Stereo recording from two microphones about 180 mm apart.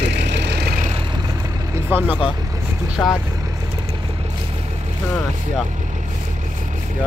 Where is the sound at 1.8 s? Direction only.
10° right (ahead or behind).